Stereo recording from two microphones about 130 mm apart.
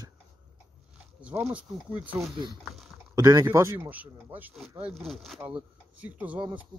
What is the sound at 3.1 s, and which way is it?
A man's voice, 25° right (ahead or behind).